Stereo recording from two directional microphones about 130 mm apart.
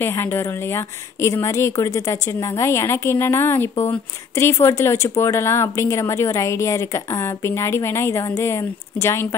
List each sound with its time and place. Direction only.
0.0 s a woman's voice: 20° left (ahead or behind)